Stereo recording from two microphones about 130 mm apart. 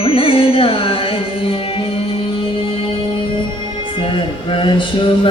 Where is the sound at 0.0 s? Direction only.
45° left (ahead or behind).